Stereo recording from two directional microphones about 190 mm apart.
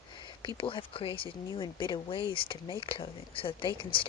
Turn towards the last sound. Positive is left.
turn(degrees=25)  # may be behind; listen again after turning